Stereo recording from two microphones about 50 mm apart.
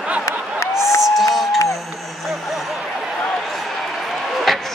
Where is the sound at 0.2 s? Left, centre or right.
Left.